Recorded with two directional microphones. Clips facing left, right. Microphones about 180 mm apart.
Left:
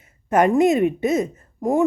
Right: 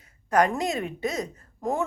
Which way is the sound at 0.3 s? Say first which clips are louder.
Left 7 dB; 20° left (ahead or behind).